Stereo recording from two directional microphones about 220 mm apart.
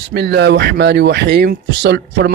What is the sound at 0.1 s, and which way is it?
Speech, 50° right (ahead or behind).